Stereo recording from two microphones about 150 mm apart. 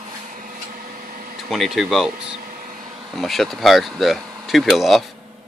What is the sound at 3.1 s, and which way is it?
Speech, centre (ahead or behind).